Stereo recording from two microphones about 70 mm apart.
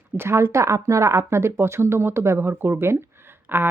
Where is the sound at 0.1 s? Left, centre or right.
Right.